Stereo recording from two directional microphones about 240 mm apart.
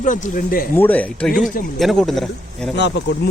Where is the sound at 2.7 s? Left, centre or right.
Left.